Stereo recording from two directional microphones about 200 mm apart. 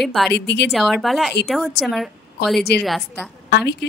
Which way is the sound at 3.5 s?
55° left (ahead or behind).